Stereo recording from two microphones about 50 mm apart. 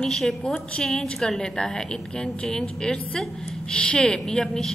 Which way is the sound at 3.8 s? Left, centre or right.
Centre.